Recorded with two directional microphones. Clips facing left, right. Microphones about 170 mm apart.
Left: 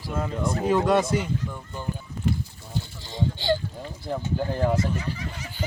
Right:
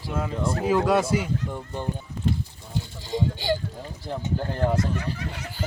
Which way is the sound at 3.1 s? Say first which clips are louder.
Even; 10° right (ahead or behind).